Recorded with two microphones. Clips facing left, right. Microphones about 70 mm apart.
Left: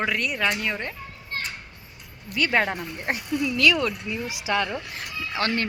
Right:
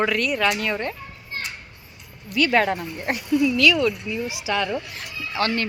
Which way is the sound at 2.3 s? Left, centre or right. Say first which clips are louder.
Right 4 dB; left.